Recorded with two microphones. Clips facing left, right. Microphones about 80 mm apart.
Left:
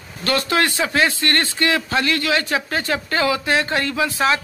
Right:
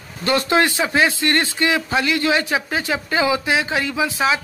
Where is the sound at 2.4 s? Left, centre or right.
Centre.